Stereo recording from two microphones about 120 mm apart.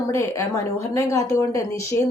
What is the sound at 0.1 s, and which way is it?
Speech, 25° left (ahead or behind).